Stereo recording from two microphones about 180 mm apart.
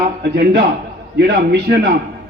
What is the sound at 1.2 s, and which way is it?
Speech, 65° right (ahead or behind).